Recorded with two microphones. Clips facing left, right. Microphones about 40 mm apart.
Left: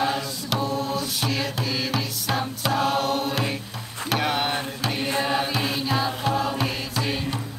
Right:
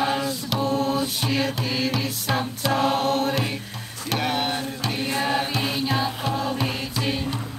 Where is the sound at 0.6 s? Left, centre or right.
Right.